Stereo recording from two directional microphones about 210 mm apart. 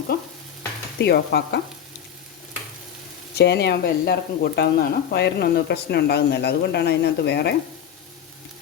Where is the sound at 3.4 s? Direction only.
55° left (ahead or behind).